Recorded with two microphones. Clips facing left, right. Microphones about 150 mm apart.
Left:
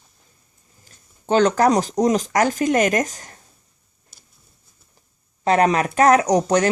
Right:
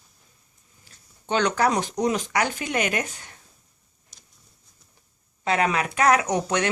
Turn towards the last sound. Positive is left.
turn(degrees=40)  # may be behind; listen again after turning